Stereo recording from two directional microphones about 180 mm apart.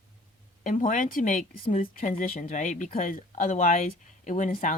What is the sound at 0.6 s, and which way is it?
Speech, 50° left (ahead or behind).